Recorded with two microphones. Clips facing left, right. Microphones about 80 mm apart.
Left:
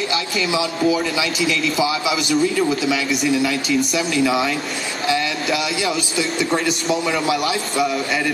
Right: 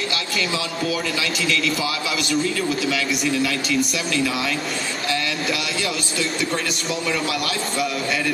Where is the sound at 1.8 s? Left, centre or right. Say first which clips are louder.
Left 5 dB; centre.